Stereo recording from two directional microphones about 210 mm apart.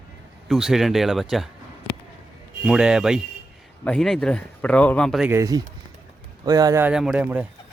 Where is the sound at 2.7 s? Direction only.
5° right (ahead or behind).